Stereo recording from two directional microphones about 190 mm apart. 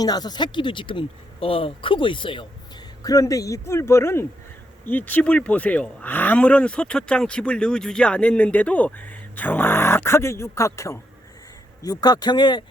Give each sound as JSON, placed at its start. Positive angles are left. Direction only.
{"t": 0.0, "sound": "speech", "side_deg": 20}